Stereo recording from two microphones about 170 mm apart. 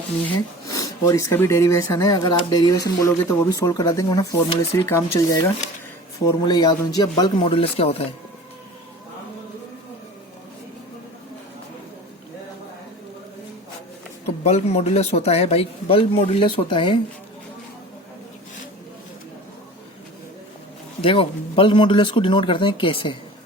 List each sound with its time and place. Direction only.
0.3 s speech: 20° left (ahead or behind)
6.5 s speech: 25° left (ahead or behind)
14.4 s speech: 35° left (ahead or behind)
21.0 s speech: 30° left (ahead or behind)